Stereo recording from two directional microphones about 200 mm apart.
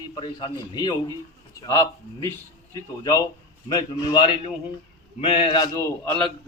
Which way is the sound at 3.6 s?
20° left (ahead or behind).